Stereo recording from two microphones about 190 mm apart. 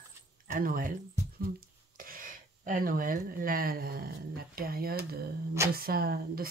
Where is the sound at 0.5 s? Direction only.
45° right (ahead or behind).